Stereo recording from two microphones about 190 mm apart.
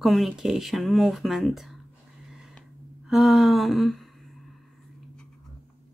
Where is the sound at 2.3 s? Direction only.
Centre (ahead or behind).